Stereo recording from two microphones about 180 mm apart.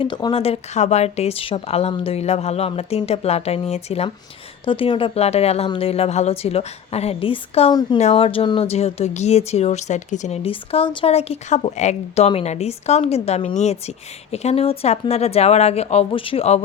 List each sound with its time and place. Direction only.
0.0 s speech: 25° left (ahead or behind)
7.7 s speech: 20° left (ahead or behind)
7.9 s speech: 35° left (ahead or behind)